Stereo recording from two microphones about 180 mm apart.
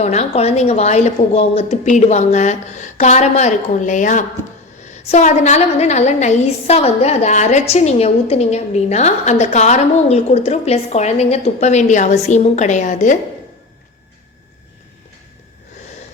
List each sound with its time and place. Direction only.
0.0 s a woman's voice: 40° left (ahead or behind)